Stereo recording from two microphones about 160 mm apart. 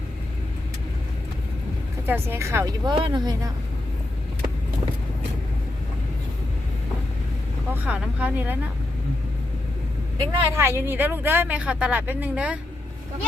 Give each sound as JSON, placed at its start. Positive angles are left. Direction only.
{"t": 2.0, "sound": "speech", "side_deg": -15}
{"t": 7.7, "sound": "speech", "side_deg": -10}
{"t": 10.5, "sound": "speech", "side_deg": -15}